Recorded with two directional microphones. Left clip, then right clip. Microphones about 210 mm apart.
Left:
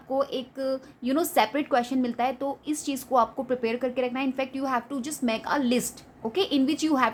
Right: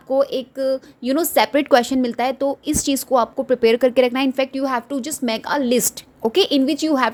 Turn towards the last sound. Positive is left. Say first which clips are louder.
# right 6 dB
turn(degrees=-25)  # may be behind; listen again after turning